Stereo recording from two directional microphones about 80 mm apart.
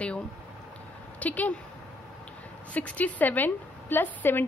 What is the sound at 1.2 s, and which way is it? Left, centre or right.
Speech, centre.